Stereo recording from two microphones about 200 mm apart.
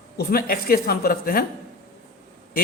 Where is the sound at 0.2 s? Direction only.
50° left (ahead or behind).